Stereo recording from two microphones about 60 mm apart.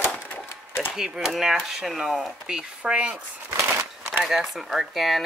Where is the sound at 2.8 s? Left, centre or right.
Centre.